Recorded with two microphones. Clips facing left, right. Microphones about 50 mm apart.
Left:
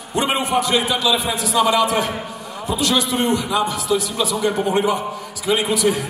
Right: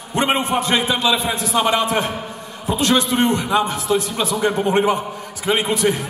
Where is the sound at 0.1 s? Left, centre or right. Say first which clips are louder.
Right 1 dB; right.